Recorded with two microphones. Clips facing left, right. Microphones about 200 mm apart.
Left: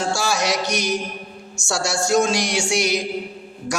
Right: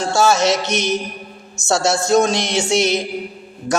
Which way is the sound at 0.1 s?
25° right (ahead or behind).